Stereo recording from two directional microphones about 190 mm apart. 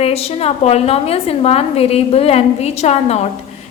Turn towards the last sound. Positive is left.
turn(degrees=35)  # may be behind; listen again after turning